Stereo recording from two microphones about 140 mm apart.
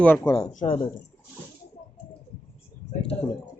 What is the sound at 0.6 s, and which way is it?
Speech, 35° left (ahead or behind).